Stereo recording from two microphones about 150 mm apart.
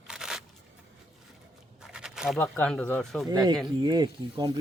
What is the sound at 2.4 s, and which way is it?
Speech, 10° left (ahead or behind).